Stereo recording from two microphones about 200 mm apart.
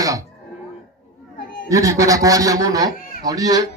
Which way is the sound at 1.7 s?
15° right (ahead or behind).